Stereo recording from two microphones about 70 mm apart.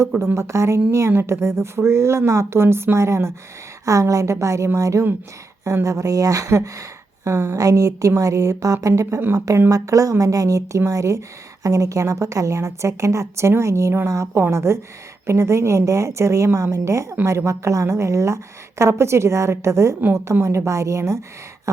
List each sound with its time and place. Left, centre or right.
0.3 s a woman's voice: right
7.3 s speech: right
7.5 s a woman's voice: right